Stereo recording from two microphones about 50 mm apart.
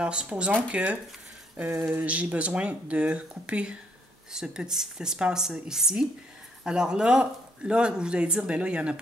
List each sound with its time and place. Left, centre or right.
0.0 s speech: centre
2.0 s speech: right
4.3 s a woman's voice: centre